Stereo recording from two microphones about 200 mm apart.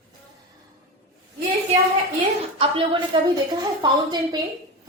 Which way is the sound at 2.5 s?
30° right (ahead or behind).